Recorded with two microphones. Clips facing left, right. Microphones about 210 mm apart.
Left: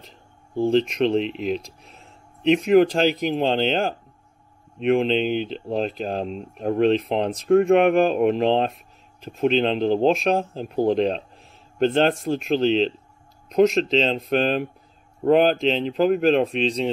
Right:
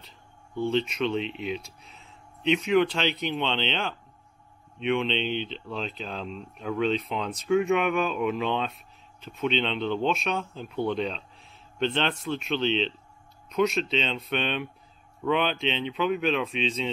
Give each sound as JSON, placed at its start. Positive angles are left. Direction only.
{"t": 0.6, "sound": "speech", "side_deg": 40}
{"t": 2.7, "sound": "speech", "side_deg": 40}